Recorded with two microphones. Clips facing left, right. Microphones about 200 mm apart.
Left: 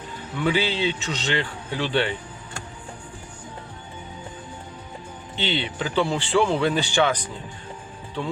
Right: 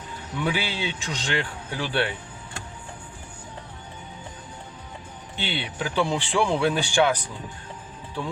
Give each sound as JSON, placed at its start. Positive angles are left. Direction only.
{"t": 0.4, "sound": "speech", "side_deg": -10}
{"t": 5.4, "sound": "speech", "side_deg": -10}